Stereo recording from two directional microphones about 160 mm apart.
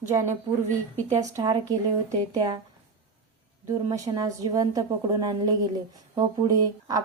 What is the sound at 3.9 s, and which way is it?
Speech, 20° right (ahead or behind).